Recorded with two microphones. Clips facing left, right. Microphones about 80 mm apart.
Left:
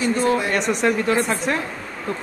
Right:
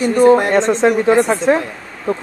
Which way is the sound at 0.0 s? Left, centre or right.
Right.